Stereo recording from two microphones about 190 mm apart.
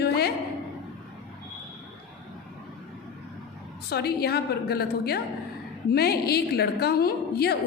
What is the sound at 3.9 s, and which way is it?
A woman's voice, 55° left (ahead or behind).